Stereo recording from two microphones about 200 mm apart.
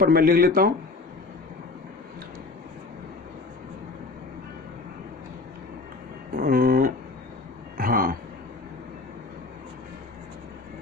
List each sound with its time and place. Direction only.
0.0 s a man's voice: 45° right (ahead or behind)
6.3 s a sound: 45° right (ahead or behind)
7.8 s vehicle: 45° right (ahead or behind)